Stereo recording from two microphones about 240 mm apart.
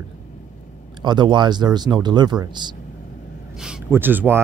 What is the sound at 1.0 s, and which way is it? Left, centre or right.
Speech, centre.